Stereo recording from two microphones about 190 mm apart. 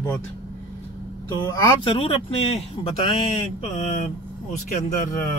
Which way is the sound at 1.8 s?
30° left (ahead or behind).